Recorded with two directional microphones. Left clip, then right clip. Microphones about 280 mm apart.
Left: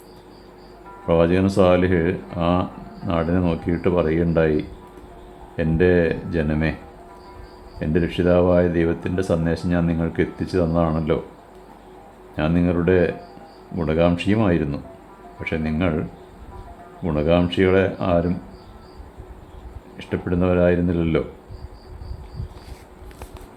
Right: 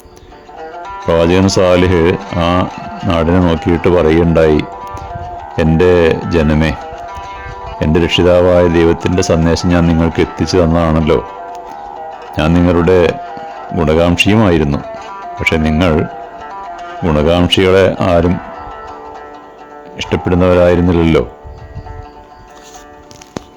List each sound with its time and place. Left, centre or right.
1.0 s speech: right
7.8 s speech: right
12.4 s speech: right
20.0 s speech: right